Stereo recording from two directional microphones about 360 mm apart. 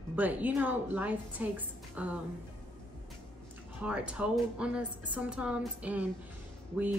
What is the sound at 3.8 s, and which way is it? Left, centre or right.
Speech, centre.